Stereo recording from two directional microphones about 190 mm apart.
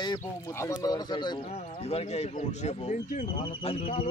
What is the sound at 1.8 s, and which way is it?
Speech, 35° left (ahead or behind).